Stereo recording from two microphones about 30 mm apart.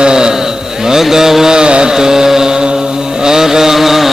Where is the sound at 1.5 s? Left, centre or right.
Right.